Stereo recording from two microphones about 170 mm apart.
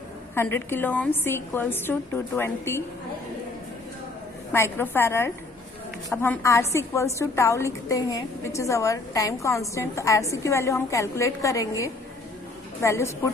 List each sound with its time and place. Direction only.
0.3 s a woman's voice: 15° left (ahead or behind)
4.5 s a woman's voice: 15° left (ahead or behind)
12.8 s a woman's voice: 15° left (ahead or behind)